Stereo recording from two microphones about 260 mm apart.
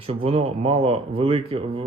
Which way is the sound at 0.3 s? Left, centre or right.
Right.